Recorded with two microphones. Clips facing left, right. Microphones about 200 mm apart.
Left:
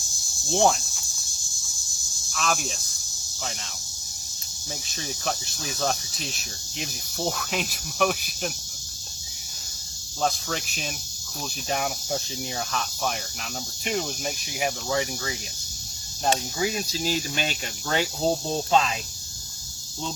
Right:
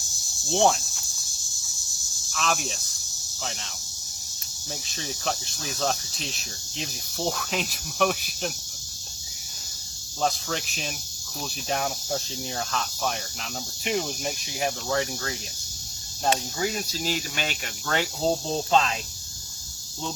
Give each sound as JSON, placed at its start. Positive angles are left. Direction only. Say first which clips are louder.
{"t": 0.4, "sound": "cricket", "louder": "even", "side_deg": 0}
{"t": 2.3, "sound": "speech", "louder": "even", "side_deg": 0}
{"t": 4.9, "sound": "cricket", "louder": "even", "side_deg": 0}
{"t": 10.2, "sound": "cricket", "louder": "even", "side_deg": 0}
{"t": 16.6, "sound": "speech", "louder": "left 2 dB", "side_deg": 15}
{"t": 18.3, "sound": "cricket", "louder": "even", "side_deg": 0}